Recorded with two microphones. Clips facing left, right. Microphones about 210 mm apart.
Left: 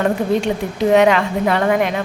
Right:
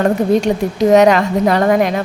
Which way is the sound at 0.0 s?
40° right (ahead or behind).